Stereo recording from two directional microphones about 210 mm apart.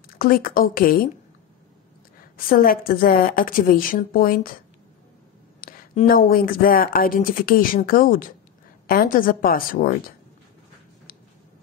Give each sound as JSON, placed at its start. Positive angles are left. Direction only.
{"t": 0.2, "sound": "speech", "side_deg": 40}
{"t": 2.3, "sound": "speech", "side_deg": 45}
{"t": 5.6, "sound": "speech", "side_deg": 45}